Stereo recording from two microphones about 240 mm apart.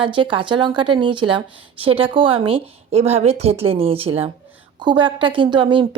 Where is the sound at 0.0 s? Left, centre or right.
Right.